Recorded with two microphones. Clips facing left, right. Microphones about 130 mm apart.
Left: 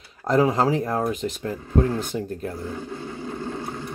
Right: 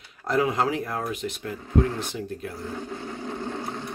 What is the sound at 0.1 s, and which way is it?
Speech, 35° left (ahead or behind).